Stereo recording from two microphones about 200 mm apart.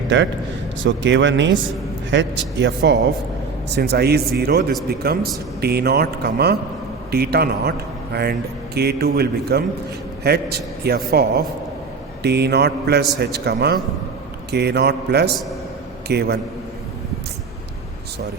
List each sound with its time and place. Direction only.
0.1 s a man's voice: 65° right (ahead or behind)
12.2 s speech: 55° right (ahead or behind)